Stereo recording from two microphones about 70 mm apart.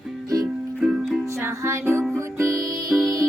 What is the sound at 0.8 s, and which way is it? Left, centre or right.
Music, centre.